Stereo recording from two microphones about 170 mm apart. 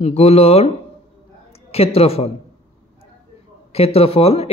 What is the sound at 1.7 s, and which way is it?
Speech, 35° left (ahead or behind).